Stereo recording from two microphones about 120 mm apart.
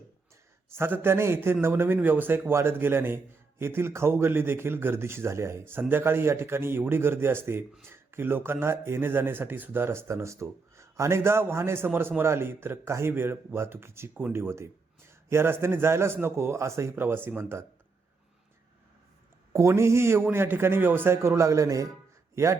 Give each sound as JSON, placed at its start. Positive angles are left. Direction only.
{"t": 0.7, "sound": "speech", "side_deg": -20}
{"t": 19.5, "sound": "speech", "side_deg": -25}